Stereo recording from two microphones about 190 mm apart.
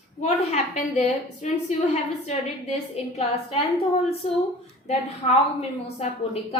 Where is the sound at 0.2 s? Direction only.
35° left (ahead or behind).